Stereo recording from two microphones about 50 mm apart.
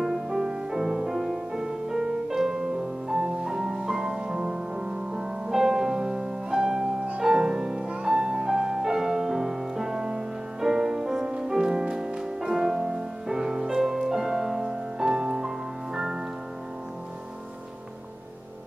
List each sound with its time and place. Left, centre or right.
0.0 s music: centre